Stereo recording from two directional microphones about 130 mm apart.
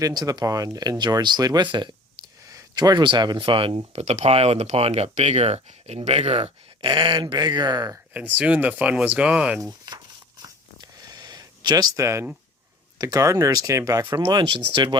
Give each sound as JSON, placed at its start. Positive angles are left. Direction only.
{"t": 0.0, "sound": "speech", "side_deg": -30}
{"t": 8.1, "sound": "speech", "side_deg": -10}
{"t": 9.9, "sound": "a sound", "side_deg": -30}
{"t": 13.0, "sound": "speech", "side_deg": -25}
{"t": 14.2, "sound": "speech", "side_deg": -35}